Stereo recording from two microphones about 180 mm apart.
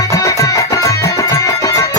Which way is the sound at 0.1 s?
15° left (ahead or behind).